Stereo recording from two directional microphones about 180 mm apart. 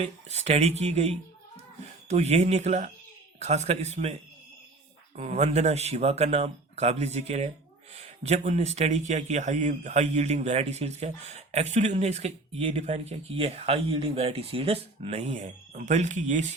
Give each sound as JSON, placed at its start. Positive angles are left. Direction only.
{"t": 0.0, "sound": "speech", "side_deg": -40}